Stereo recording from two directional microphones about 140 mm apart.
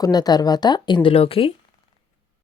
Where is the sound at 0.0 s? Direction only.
30° left (ahead or behind).